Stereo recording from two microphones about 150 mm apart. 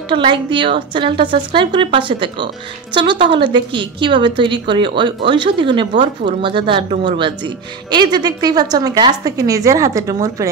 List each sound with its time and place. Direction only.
0.1 s a woman's voice: 35° right (ahead or behind)